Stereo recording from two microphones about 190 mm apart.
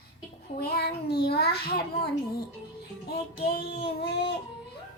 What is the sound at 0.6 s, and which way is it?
A child's voice, 55° left (ahead or behind).